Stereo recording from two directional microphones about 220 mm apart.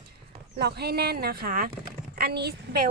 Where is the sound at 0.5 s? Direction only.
45° right (ahead or behind).